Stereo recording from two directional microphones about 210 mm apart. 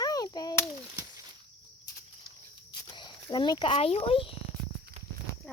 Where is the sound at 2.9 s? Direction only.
20° left (ahead or behind).